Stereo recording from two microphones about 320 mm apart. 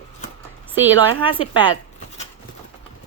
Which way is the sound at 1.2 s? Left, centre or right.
Centre.